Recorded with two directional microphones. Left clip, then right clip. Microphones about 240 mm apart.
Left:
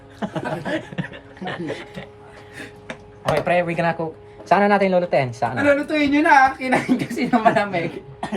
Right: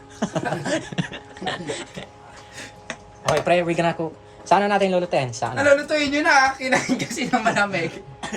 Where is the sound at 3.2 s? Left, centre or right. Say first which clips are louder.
Even; centre.